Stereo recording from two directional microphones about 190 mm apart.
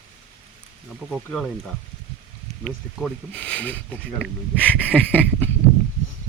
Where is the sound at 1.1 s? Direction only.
5° left (ahead or behind).